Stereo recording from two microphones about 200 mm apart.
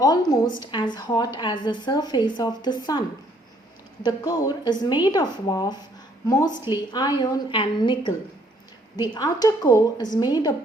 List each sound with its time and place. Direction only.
0.0 s a woman's voice: 20° left (ahead or behind)
4.0 s a woman's voice: 20° left (ahead or behind)